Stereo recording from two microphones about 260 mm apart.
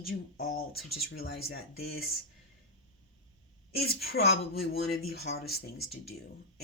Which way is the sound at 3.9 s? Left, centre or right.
Left.